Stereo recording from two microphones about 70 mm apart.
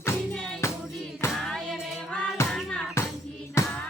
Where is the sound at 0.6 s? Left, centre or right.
Left.